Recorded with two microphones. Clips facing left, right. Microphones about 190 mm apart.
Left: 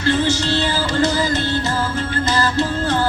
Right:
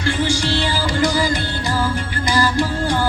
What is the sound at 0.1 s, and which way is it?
Music, 10° right (ahead or behind).